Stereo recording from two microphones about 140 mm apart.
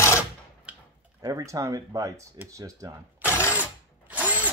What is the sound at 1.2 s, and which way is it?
Speech, 25° right (ahead or behind).